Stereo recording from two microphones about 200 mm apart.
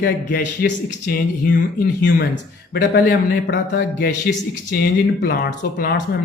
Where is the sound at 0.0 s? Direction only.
50° left (ahead or behind).